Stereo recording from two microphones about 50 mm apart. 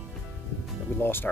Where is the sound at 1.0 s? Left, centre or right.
Left.